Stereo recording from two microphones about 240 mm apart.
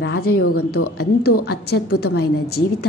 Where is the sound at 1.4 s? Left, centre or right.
Left.